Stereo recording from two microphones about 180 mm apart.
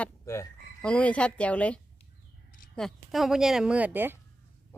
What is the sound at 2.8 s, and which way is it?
Speech, centre (ahead or behind).